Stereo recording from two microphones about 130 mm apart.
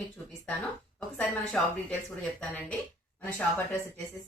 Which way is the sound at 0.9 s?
5° left (ahead or behind).